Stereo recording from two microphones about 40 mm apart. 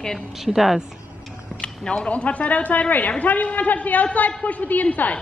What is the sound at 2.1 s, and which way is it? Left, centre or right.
A woman's voice, left.